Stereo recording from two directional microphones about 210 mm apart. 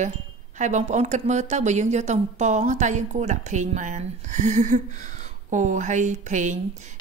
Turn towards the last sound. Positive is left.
turn(degrees=-35)  # may be behind; listen again after turning